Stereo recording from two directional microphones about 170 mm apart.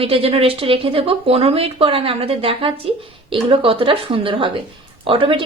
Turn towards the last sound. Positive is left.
turn(degrees=-30)  # may be behind; listen again after turning